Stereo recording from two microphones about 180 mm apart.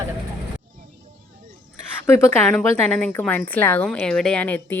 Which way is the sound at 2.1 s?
15° left (ahead or behind).